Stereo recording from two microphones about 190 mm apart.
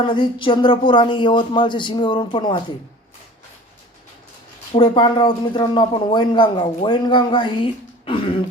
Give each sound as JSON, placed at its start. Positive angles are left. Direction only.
{"t": 0.0, "sound": "speech", "side_deg": 25}
{"t": 4.7, "sound": "speech", "side_deg": 25}